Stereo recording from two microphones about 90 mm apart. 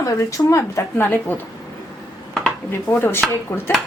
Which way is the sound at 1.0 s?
20° left (ahead or behind).